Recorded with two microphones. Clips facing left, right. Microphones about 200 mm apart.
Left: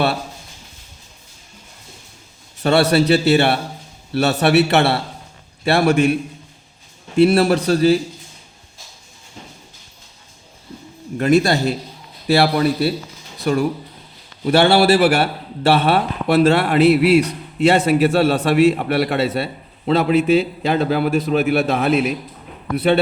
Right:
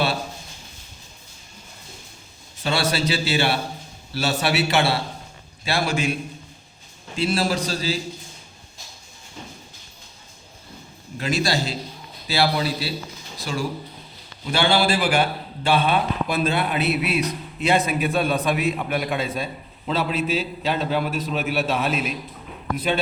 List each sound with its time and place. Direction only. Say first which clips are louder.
2.6 s a man's voice: left 9 dB; 65° left (ahead or behind)
7.2 s a man's voice: left 9 dB; 60° left (ahead or behind)
11.2 s a man's voice: left 9 dB; 60° left (ahead or behind)